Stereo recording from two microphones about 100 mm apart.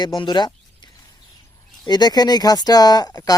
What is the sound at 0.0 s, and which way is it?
Speech, 50° left (ahead or behind).